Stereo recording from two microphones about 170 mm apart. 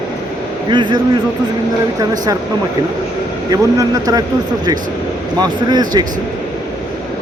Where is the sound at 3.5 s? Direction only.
20° right (ahead or behind).